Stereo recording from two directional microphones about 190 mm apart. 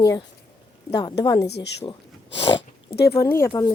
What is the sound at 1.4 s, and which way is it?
Speech, 60° left (ahead or behind).